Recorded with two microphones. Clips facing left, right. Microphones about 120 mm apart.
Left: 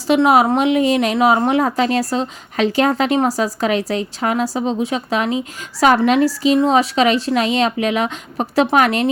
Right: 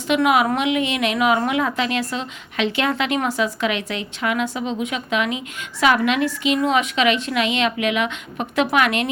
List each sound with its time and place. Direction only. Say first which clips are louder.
0.1 s a woman's voice: left 5 dB; 35° left (ahead or behind)